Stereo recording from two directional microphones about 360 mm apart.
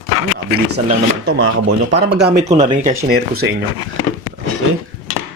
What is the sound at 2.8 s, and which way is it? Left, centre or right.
Speech, right.